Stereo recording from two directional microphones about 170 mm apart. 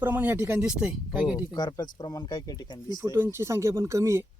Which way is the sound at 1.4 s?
25° left (ahead or behind).